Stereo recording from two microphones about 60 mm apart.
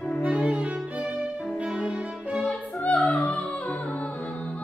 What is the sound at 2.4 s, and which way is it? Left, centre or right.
Opera, left.